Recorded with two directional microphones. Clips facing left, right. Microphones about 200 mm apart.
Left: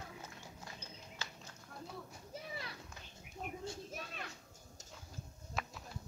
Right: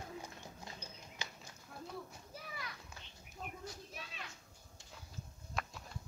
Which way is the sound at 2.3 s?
30° left (ahead or behind).